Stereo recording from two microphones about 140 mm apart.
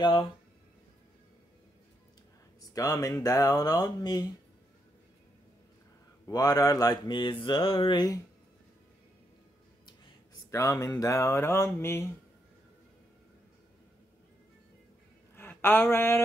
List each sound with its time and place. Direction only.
0.0 s mantra: 35° left (ahead or behind)
2.7 s speech: 25° left (ahead or behind)
6.2 s mantra: 25° left (ahead or behind)
10.5 s speech: 25° left (ahead or behind)
15.3 s a sound: 15° left (ahead or behind)